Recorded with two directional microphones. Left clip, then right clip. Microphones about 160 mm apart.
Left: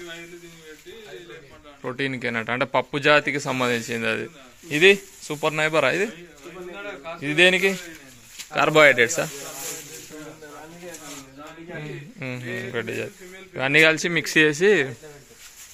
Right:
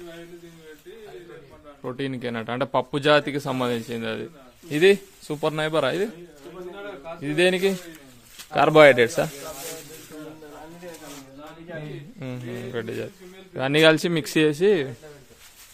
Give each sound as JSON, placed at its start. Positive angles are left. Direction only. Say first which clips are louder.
{"t": 2.0, "sound": "a man's voice", "louder": "left 4 dB", "side_deg": -15}
{"t": 3.9, "sound": "a man's voice", "louder": "left 5 dB", "side_deg": 0}
{"t": 4.6, "sound": "a man's voice", "louder": "left 2 dB", "side_deg": -30}
{"t": 7.2, "sound": "a man's voice", "louder": "left 4 dB", "side_deg": -20}
{"t": 12.2, "sound": "speech", "louder": "left 4 dB", "side_deg": -10}
{"t": 13.6, "sound": "a man's voice", "louder": "even", "side_deg": -30}